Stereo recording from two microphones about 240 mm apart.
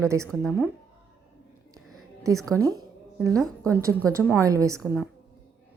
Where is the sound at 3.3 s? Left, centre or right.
Centre.